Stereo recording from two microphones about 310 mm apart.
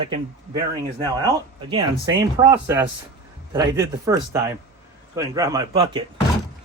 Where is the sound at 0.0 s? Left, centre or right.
Centre.